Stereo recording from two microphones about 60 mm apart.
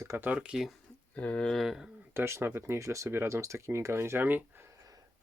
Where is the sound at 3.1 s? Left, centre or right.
Right.